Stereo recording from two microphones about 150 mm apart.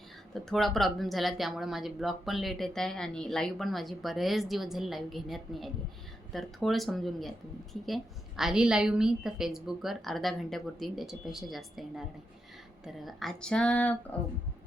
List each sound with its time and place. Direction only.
0.3 s speech: centre (ahead or behind)